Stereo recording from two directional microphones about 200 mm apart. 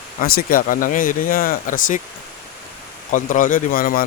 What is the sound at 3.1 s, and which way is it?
Speech, 40° left (ahead or behind).